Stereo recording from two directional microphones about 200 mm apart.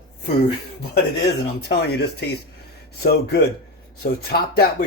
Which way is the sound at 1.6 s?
55° left (ahead or behind).